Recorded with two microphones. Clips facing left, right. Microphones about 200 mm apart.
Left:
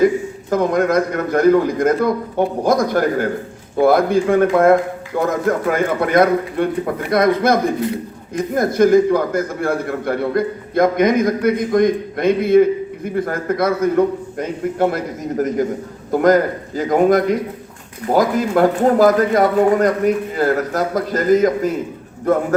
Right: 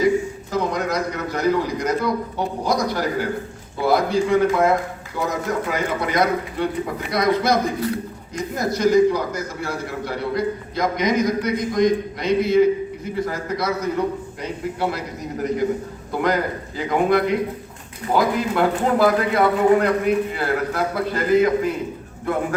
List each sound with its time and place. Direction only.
0.5 s a man's voice: 50° left (ahead or behind)